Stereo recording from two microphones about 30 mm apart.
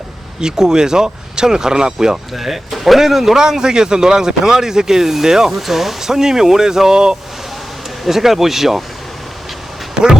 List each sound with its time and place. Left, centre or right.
0.3 s speech: right
2.3 s speech: centre
3.3 s speech: centre
5.5 s speech: centre
8.0 s speech: centre
9.9 s a sound: right